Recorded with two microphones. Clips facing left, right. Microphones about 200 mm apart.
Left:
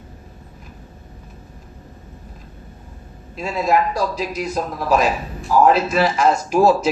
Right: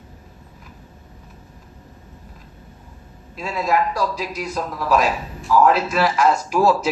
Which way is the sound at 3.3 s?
20° left (ahead or behind).